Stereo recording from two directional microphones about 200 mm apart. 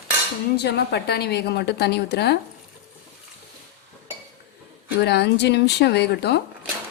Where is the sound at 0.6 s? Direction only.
55° left (ahead or behind).